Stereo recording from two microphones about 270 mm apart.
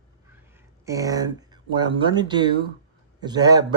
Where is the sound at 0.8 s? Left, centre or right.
Centre.